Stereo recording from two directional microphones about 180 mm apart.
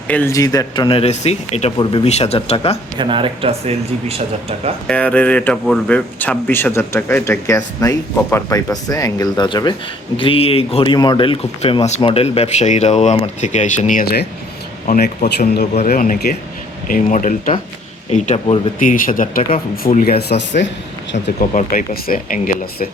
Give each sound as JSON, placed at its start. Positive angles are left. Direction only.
{"t": 0.1, "sound": "speech", "side_deg": 15}
{"t": 3.0, "sound": "speech", "side_deg": -30}
{"t": 4.9, "sound": "speech", "side_deg": 5}
{"t": 14.8, "sound": "speech", "side_deg": 55}
{"t": 18.8, "sound": "speech", "side_deg": 50}
{"t": 19.4, "sound": "speech", "side_deg": 30}
{"t": 19.9, "sound": "speech", "side_deg": 55}
{"t": 21.5, "sound": "speech", "side_deg": 50}